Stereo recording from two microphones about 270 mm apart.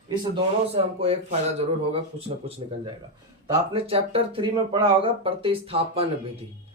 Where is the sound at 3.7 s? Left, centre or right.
Right.